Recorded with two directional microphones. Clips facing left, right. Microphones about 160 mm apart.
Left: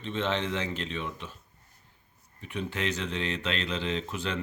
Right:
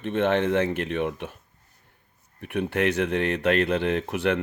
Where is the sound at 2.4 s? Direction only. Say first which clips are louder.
Right 8 dB; 60° right (ahead or behind).